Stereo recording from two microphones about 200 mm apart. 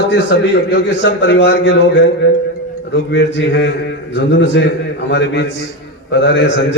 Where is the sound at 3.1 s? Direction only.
65° left (ahead or behind).